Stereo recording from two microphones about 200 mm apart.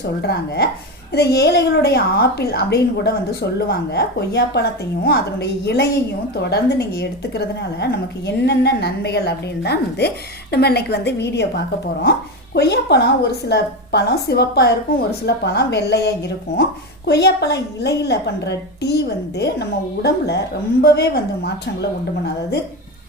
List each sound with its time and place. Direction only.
0.2 s a woman's voice: 55° left (ahead or behind)